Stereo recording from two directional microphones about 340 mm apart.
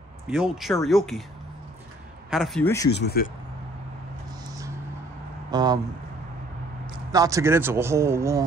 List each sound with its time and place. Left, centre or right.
0.3 s speech: centre
2.3 s speech: centre
2.9 s speech: left
5.5 s speech: centre
7.1 s a man's voice: centre